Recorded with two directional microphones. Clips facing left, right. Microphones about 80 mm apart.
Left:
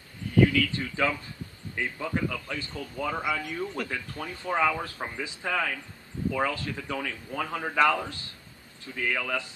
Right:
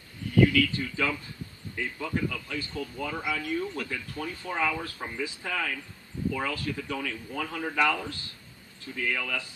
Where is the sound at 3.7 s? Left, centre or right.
Left.